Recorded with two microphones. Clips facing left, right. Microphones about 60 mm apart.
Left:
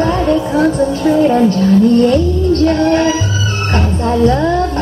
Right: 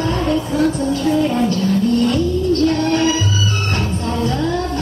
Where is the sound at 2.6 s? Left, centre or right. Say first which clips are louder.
Left 6 dB; left.